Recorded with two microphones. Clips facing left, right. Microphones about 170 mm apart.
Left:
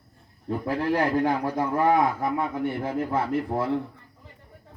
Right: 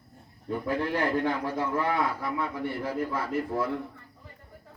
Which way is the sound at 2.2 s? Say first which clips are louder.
Left 5 dB; 20° left (ahead or behind).